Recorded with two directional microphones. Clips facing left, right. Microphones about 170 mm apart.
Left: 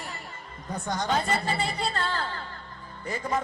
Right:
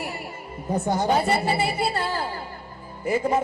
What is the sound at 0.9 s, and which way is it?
Speech, 10° right (ahead or behind).